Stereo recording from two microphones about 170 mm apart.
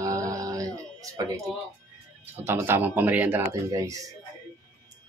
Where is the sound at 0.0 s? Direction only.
20° right (ahead or behind).